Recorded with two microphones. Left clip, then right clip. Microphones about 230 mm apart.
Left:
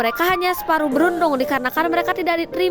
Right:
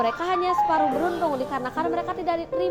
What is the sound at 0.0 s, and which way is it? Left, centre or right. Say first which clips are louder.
A woman's voice: left 5 dB; left.